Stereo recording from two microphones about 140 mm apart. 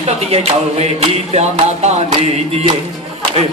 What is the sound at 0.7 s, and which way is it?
Speech, 50° right (ahead or behind).